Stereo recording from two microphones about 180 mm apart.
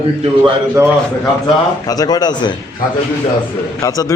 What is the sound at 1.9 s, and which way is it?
Speech, 20° left (ahead or behind).